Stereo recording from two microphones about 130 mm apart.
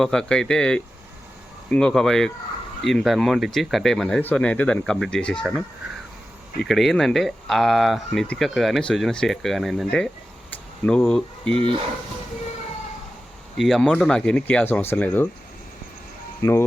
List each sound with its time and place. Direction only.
0.0 s speech: 5° left (ahead or behind)
6.6 s speech: centre (ahead or behind)
10.5 s a sound: 5° left (ahead or behind)
13.6 s speech: centre (ahead or behind)
16.4 s speech: 20° left (ahead or behind)